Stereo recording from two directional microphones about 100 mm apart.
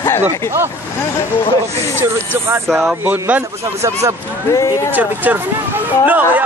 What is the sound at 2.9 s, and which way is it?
Speech, 20° right (ahead or behind).